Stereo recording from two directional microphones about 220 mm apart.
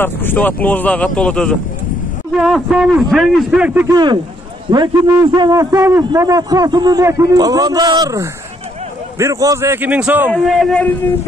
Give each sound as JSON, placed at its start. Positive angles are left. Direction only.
{"t": 0.0, "sound": "a man's voice", "side_deg": 10}
{"t": 3.9, "sound": "a man's voice", "side_deg": -20}